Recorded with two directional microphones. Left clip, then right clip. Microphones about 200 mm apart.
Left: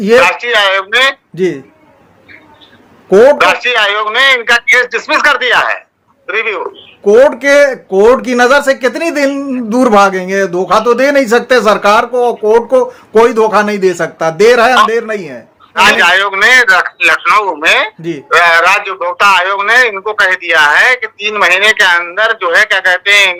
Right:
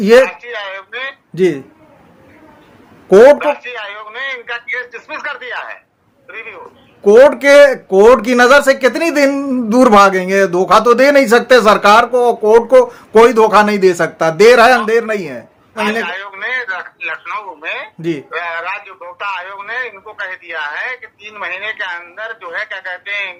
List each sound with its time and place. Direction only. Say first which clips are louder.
0.3 s a man's voice: left 15 dB; 45° left (ahead or behind)
1.4 s speech: right 4 dB; 5° right (ahead or behind)
3.1 s speech: even; 5° right (ahead or behind)
3.3 s a man's voice: left 9 dB; 45° left (ahead or behind)
7.0 s speech: even; 5° right (ahead or behind)
15.8 s a man's voice: left 12 dB; 45° left (ahead or behind)